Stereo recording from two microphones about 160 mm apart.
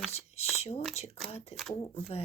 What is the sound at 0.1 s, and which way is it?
Speech, 40° left (ahead or behind).